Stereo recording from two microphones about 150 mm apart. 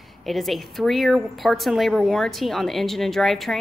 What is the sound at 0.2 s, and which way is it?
A woman's voice, centre (ahead or behind).